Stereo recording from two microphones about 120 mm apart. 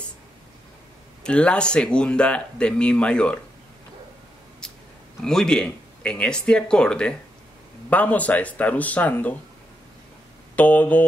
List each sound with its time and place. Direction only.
1.2 s speech: 10° left (ahead or behind)
5.2 s speech: 5° left (ahead or behind)
10.5 s speech: 15° left (ahead or behind)